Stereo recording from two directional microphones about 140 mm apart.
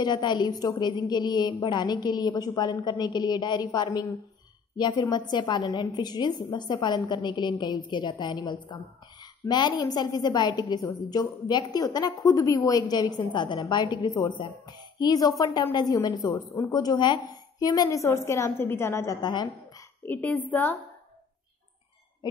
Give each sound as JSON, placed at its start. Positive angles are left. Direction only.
{"t": 0.0, "sound": "a woman's voice", "side_deg": 30}
{"t": 19.2, "sound": "a woman's voice", "side_deg": 30}
{"t": 20.1, "sound": "a woman's voice", "side_deg": 10}